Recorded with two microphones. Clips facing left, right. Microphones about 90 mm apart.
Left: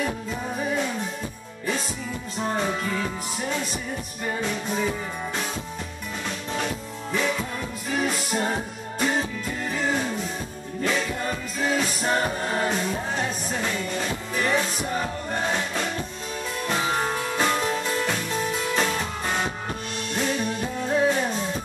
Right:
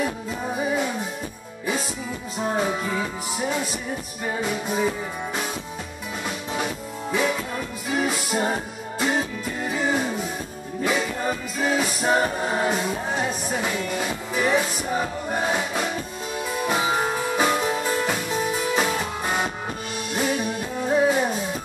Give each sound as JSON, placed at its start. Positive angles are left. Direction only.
{"t": 0.0, "sound": "music", "side_deg": -10}
{"t": 2.3, "sound": "music", "side_deg": -5}
{"t": 6.5, "sound": "music", "side_deg": -10}